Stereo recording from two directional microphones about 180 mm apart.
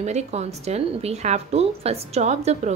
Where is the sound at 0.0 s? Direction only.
40° right (ahead or behind).